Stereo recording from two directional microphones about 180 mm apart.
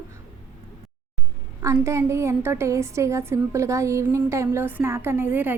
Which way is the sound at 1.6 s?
15° right (ahead or behind).